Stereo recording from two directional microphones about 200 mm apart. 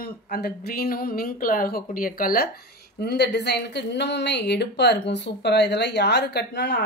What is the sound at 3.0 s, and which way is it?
Speech, 55° left (ahead or behind).